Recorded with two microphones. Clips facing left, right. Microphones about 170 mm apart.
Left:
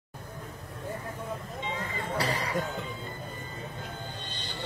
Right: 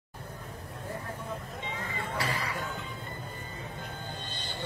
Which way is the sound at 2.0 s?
40° left (ahead or behind).